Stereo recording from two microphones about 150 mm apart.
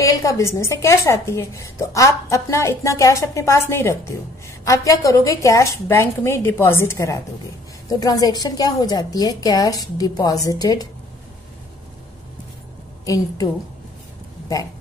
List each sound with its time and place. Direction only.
0.0 s a woman's voice: 20° left (ahead or behind)
13.0 s a woman's voice: 25° left (ahead or behind)